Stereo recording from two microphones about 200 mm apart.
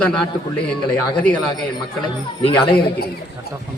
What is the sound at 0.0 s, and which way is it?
A man's voice, 5° left (ahead or behind).